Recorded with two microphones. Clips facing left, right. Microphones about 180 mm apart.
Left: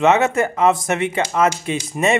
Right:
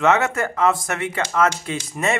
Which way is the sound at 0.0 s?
20° left (ahead or behind).